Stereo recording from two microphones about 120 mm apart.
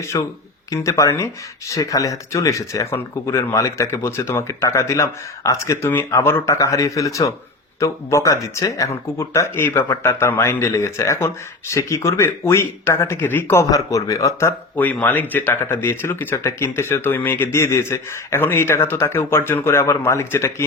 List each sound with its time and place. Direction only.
0.1 s speech: 30° left (ahead or behind)